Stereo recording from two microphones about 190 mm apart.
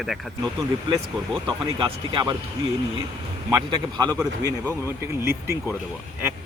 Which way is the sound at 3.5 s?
20° right (ahead or behind).